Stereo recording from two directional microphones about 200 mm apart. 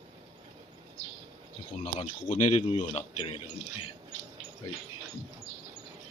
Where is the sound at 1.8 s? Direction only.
40° left (ahead or behind).